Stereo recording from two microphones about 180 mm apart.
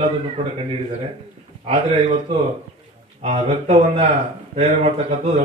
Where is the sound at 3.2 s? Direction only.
35° right (ahead or behind).